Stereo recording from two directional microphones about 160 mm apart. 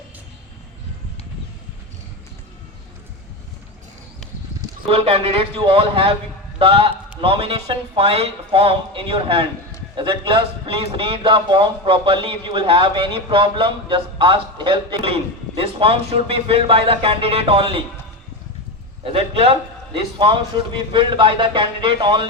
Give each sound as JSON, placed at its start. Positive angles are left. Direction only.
{"t": 4.9, "sound": "a man's voice", "side_deg": -40}
{"t": 19.0, "sound": "a man's voice", "side_deg": -35}